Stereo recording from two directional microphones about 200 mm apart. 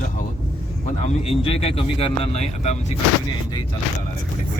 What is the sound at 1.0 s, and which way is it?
Speech, 30° left (ahead or behind).